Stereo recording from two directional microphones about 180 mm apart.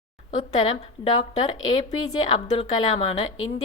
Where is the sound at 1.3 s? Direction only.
30° left (ahead or behind).